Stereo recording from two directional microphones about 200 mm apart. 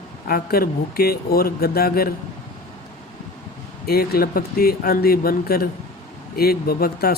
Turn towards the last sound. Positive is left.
turn(degrees=50)  # may be behind; listen again after turning